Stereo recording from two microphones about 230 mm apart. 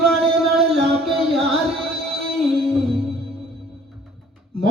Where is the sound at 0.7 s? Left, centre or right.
Centre.